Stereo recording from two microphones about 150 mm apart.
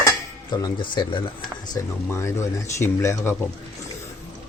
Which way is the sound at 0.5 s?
25° left (ahead or behind).